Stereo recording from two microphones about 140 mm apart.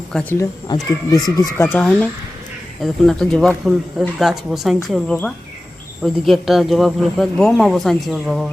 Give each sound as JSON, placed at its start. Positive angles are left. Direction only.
{"t": 0.1, "sound": "speech", "side_deg": 5}
{"t": 0.3, "sound": "speech", "side_deg": 25}
{"t": 1.6, "sound": "speech", "side_deg": 10}